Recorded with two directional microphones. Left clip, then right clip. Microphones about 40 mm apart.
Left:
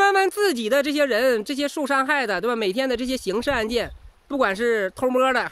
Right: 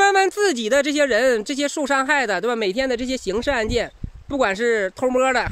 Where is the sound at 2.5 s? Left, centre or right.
Left.